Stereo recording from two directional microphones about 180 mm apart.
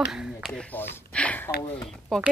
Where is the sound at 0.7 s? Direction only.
10° left (ahead or behind).